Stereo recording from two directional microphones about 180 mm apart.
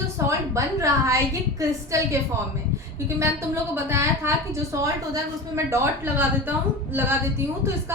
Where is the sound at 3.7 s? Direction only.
15° right (ahead or behind).